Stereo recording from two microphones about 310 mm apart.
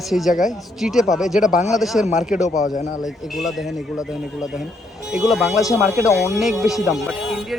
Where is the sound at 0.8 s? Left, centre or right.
Centre.